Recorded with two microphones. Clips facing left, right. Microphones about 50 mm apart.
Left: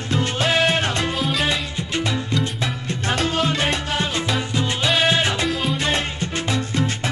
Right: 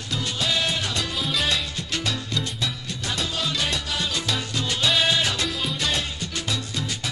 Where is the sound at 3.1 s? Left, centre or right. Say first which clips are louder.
Left 7 dB; left.